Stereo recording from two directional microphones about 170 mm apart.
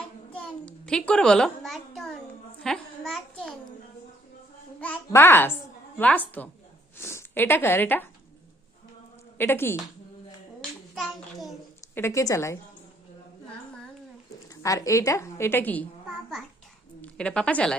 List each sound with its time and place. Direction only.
0.3 s a child's voice: 5° left (ahead or behind)
4.8 s a woman's voice: 10° left (ahead or behind)
9.4 s a woman's voice: 15° left (ahead or behind)
10.9 s child singing: centre (ahead or behind)
11.9 s a woman's voice: 15° left (ahead or behind)
14.5 s a woman's voice: 20° left (ahead or behind)
17.0 s a woman's voice: 5° left (ahead or behind)